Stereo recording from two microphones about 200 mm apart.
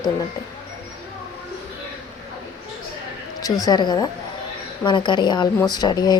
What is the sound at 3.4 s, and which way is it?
Speech, 20° left (ahead or behind).